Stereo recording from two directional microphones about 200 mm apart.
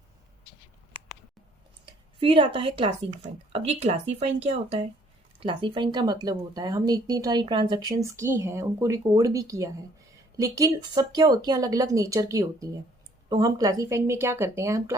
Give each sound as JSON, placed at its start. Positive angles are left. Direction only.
{"t": 2.2, "sound": "a woman's voice", "side_deg": -25}